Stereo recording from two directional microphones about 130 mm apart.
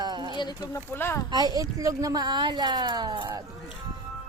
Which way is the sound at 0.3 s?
30° left (ahead or behind).